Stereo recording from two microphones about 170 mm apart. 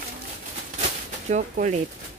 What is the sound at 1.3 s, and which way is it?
Speech, 45° right (ahead or behind).